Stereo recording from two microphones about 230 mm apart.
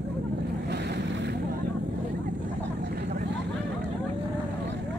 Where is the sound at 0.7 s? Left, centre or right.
Right.